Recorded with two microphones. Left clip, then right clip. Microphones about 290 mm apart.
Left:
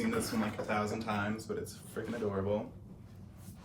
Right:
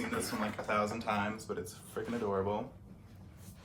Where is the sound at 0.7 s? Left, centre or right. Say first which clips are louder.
Right 3 dB; centre.